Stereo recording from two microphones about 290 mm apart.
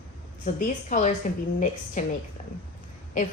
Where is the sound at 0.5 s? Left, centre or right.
Left.